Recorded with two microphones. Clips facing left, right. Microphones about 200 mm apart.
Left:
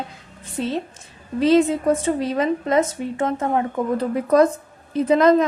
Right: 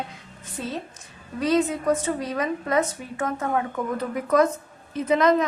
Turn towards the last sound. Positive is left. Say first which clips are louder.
# left 5 dB
turn(degrees=30)  # may be behind; listen again after turning